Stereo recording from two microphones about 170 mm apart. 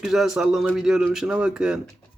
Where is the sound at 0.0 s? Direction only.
Centre (ahead or behind).